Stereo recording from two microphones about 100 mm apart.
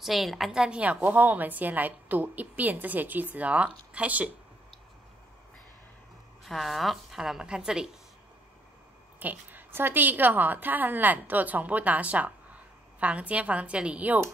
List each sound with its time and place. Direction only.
0.0 s a woman's voice: centre (ahead or behind)
6.4 s a woman's voice: centre (ahead or behind)
9.2 s a woman's voice: 15° right (ahead or behind)